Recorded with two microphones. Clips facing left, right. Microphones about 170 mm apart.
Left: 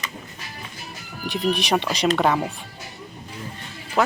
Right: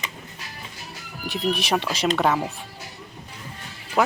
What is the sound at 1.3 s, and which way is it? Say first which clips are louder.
Speech: left 2 dB; centre (ahead or behind).